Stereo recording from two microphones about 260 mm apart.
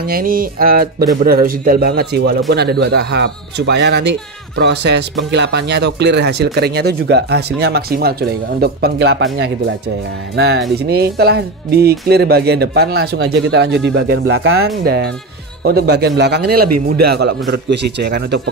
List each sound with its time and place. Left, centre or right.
0.0 s speech: right
14.2 s speech: right
15.6 s speech: right
16.6 s a man's voice: right
17.0 s speech: right